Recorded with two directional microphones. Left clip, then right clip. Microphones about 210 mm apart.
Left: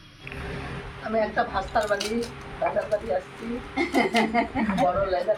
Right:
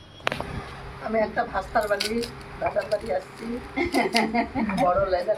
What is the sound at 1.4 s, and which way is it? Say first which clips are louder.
Speech: even; 25° right (ahead or behind).